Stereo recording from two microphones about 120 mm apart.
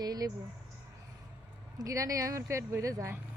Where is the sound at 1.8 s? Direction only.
30° right (ahead or behind).